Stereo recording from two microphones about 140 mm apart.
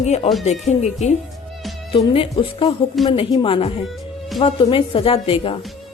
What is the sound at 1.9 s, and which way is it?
A woman's voice, 40° left (ahead or behind).